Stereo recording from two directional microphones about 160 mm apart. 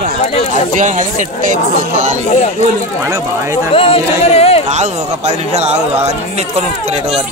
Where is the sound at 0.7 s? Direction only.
50° right (ahead or behind).